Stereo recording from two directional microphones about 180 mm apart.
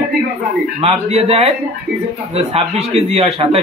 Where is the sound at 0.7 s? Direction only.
35° right (ahead or behind).